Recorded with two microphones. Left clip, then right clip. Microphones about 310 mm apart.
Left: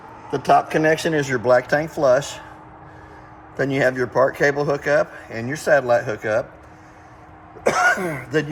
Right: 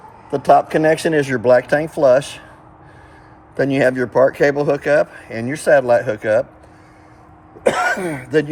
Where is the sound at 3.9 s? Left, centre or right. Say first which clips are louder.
Right 4 dB; right.